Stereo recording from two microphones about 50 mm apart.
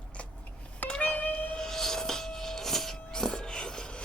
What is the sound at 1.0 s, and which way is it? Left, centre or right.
Music, left.